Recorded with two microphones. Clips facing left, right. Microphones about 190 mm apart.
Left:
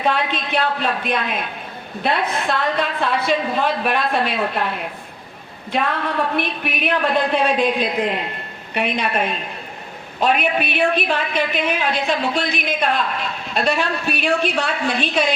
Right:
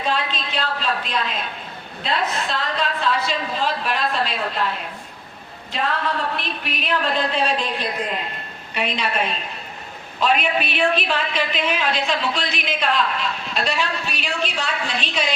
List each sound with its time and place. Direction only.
0.0 s a woman's voice: 60° left (ahead or behind)
6.3 s a woman's voice: 55° left (ahead or behind)